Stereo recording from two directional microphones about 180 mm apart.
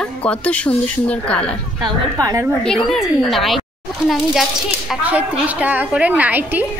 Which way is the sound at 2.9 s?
Centre (ahead or behind).